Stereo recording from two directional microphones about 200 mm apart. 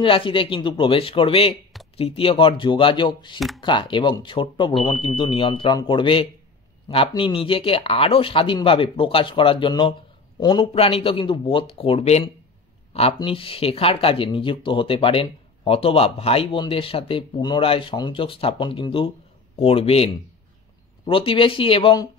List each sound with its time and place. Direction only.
0.0 s speech: 25° left (ahead or behind)
3.3 s speech: centre (ahead or behind)
3.6 s speech: 25° left (ahead or behind)